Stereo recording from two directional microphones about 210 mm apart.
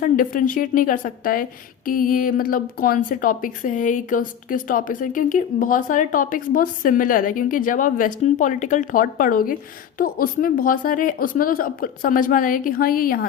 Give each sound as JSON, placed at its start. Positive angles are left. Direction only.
{"t": 0.0, "sound": "a woman's voice", "side_deg": 40}